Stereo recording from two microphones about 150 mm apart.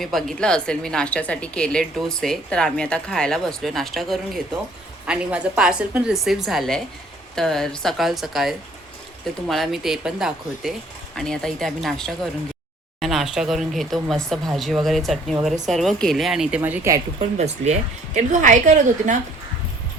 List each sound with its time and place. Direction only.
0.0 s a woman's voice: centre (ahead or behind)
16.6 s speech: 15° right (ahead or behind)
17.2 s a woman's voice: 50° right (ahead or behind)